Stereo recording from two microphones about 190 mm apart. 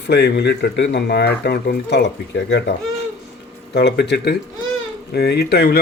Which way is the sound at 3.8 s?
65° left (ahead or behind).